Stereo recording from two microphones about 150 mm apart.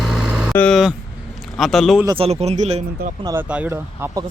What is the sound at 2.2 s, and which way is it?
Speech, 45° right (ahead or behind).